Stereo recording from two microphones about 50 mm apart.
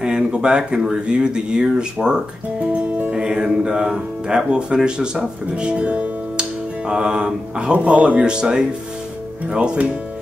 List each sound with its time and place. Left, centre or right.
0.0 s speech: centre
2.6 s speech: right